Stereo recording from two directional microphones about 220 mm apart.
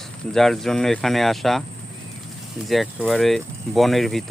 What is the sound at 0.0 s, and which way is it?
Speech, centre (ahead or behind).